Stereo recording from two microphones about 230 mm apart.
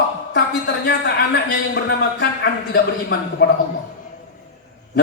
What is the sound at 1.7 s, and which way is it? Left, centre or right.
A man's voice, left.